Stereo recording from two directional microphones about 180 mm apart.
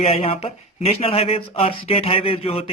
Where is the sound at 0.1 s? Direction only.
35° left (ahead or behind).